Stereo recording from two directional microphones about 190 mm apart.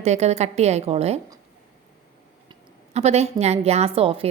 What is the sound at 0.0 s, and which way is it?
A woman's voice, 35° right (ahead or behind).